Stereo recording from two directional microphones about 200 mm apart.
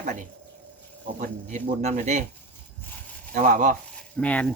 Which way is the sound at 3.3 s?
40° right (ahead or behind).